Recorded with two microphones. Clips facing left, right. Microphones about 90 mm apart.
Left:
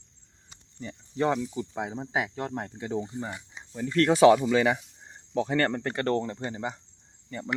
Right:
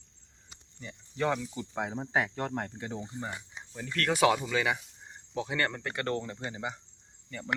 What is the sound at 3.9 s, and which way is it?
Speech, 30° left (ahead or behind).